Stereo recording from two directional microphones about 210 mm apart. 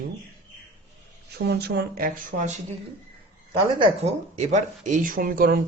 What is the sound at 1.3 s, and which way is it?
Speech, 50° right (ahead or behind).